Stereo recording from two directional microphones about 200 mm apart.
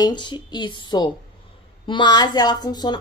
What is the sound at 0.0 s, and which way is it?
A woman's voice, 20° left (ahead or behind).